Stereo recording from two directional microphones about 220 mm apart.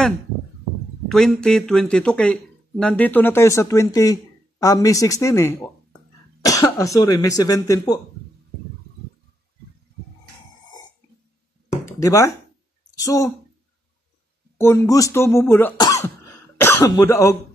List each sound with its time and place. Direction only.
1.0 s speech: centre (ahead or behind)
11.8 s a sound: 15° left (ahead or behind)
12.9 s speech: 15° left (ahead or behind)
14.6 s speech: 15° left (ahead or behind)